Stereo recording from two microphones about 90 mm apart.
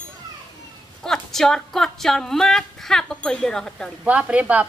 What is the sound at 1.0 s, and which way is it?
A woman's voice, 5° left (ahead or behind).